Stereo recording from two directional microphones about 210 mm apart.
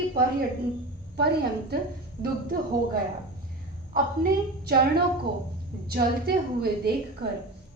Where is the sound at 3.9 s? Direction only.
45° right (ahead or behind).